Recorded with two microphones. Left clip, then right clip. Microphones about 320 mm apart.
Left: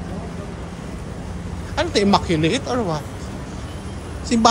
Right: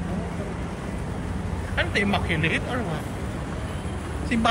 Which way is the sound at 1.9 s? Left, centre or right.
Centre.